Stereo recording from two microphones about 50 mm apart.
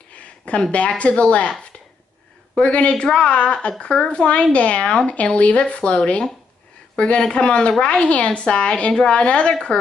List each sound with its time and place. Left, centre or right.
0.1 s speech: left